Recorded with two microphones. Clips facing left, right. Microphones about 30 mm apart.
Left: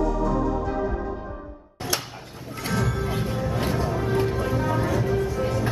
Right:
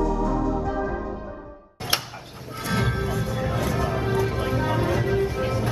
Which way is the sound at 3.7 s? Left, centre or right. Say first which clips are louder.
Even; right.